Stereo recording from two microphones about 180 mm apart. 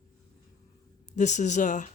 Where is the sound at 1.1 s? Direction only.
40° left (ahead or behind).